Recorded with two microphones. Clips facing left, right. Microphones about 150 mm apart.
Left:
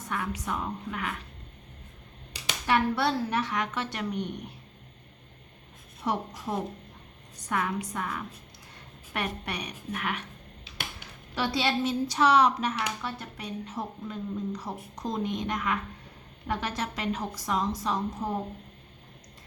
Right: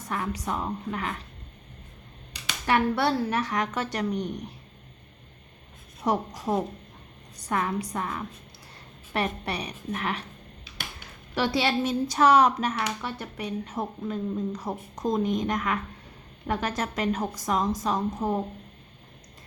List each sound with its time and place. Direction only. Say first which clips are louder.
0.1 s a woman's voice: right 2 dB; 35° right (ahead or behind)
2.6 s a woman's voice: right 2 dB; 55° right (ahead or behind)
6.1 s a woman's voice: right 5 dB; 40° right (ahead or behind)
11.3 s speech: right 3 dB; 55° right (ahead or behind)